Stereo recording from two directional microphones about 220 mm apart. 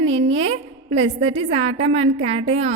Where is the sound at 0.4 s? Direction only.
30° right (ahead or behind).